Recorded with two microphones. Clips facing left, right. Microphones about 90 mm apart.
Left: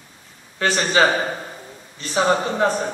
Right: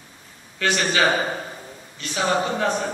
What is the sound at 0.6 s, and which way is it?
Speech, 30° left (ahead or behind).